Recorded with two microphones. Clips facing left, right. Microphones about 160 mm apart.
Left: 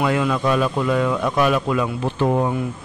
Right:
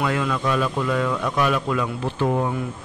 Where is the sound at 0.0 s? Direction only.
20° left (ahead or behind).